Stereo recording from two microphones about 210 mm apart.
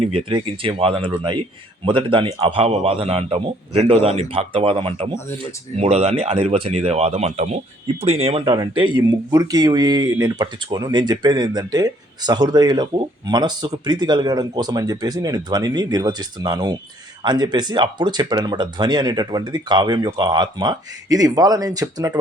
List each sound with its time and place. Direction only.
0.0 s speech: 25° right (ahead or behind)